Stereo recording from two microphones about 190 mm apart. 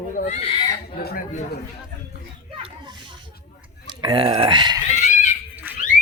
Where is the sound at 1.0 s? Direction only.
50° left (ahead or behind).